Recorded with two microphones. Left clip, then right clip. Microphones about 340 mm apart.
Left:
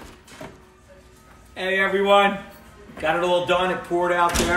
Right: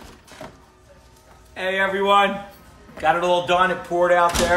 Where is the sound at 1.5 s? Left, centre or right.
Centre.